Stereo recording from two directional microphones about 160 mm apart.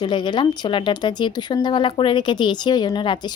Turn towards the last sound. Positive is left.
turn(degrees=30)  # may be behind; listen again after turning